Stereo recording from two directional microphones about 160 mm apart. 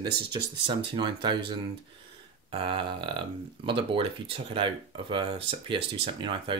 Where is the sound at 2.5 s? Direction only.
30° right (ahead or behind).